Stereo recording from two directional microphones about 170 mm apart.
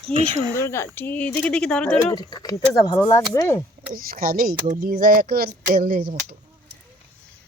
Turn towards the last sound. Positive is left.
turn(degrees=-65)  # may be behind; listen again after turning